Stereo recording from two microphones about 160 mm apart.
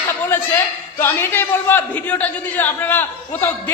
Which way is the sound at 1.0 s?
15° left (ahead or behind).